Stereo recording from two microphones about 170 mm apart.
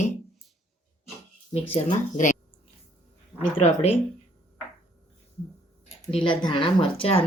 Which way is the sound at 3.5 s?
35° left (ahead or behind).